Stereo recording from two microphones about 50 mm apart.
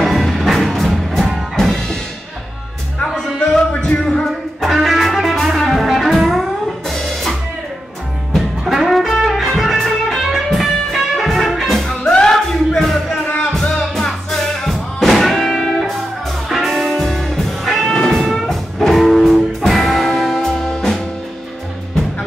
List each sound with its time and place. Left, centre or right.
0.0 s music: centre
3.3 s music: centre
3.7 s music: left
4.0 s music: centre
11.9 s music: centre
18.1 s music: centre